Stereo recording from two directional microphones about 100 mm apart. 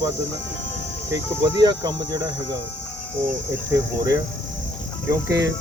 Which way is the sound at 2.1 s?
40° right (ahead or behind).